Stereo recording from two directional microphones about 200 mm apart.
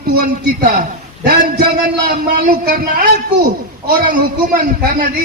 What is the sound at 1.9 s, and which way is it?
A man's voice, 50° right (ahead or behind).